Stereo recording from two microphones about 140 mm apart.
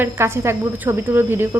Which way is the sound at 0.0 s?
15° right (ahead or behind).